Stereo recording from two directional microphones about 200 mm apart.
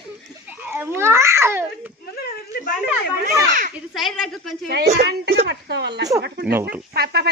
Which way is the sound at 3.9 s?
Centre (ahead or behind).